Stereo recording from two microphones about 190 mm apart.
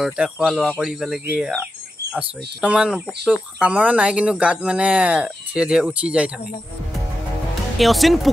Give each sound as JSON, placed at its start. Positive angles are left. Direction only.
{"t": 0.0, "sound": "speech", "side_deg": -5}
{"t": 7.7, "sound": "speech", "side_deg": 0}